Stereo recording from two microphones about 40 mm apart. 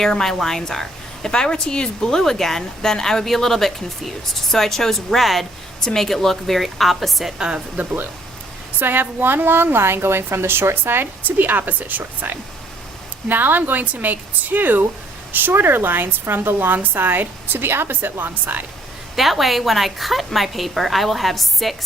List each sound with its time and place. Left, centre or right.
0.1 s a woman's voice: centre
7.3 s speech: centre
8.8 s speech: right
9.7 s a woman's voice: right
11.2 s a woman's voice: right
16.6 s speech: right
19.1 s a woman's voice: centre